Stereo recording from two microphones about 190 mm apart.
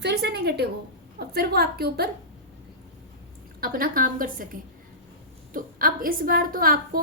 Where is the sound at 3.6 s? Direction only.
50° right (ahead or behind).